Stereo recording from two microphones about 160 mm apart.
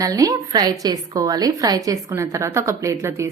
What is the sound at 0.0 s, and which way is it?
Speech, 20° right (ahead or behind).